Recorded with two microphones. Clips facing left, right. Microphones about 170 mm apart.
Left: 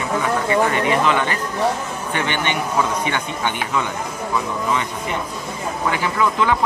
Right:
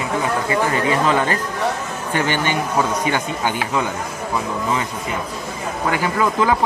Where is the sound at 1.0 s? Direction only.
35° right (ahead or behind).